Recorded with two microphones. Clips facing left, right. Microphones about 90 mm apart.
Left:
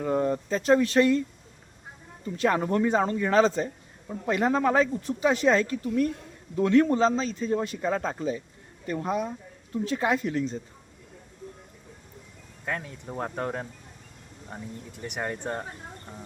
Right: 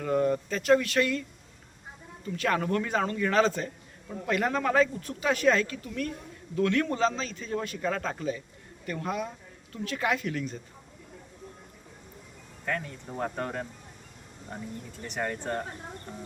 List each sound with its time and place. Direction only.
0.0 s speech: 20° left (ahead or behind)
2.3 s speech: 25° left (ahead or behind)
12.6 s speech: 10° left (ahead or behind)
14.9 s speech: 15° left (ahead or behind)